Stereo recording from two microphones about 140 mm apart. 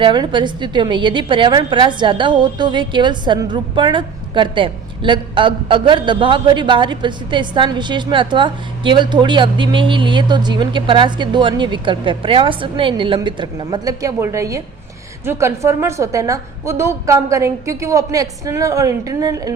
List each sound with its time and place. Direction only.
0.0 s a woman's voice: 35° right (ahead or behind)